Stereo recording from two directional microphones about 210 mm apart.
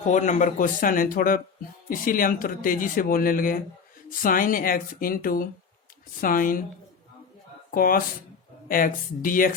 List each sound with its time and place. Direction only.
0.0 s speech: 35° left (ahead or behind)
7.7 s speech: 45° left (ahead or behind)